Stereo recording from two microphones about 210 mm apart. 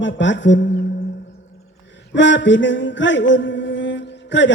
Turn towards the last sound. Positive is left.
turn(degrees=60)  # may be behind; listen again after turning